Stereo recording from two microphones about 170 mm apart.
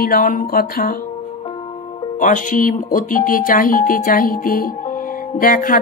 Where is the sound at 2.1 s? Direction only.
50° left (ahead or behind).